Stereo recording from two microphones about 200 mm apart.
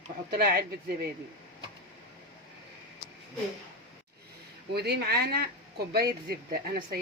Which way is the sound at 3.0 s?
20° left (ahead or behind).